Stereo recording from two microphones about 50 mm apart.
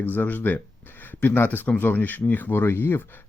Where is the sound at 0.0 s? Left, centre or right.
Left.